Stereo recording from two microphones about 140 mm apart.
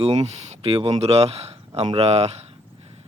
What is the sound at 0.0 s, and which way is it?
Speech, 45° right (ahead or behind).